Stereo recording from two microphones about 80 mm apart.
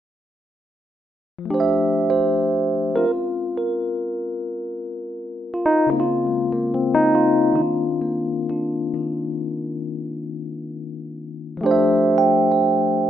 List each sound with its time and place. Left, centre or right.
1.3 s electric piano: centre
8.5 s music: centre
11.5 s electric piano: centre